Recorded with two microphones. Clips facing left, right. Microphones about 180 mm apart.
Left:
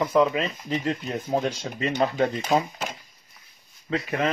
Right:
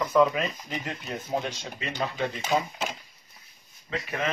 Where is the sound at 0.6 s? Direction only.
35° left (ahead or behind).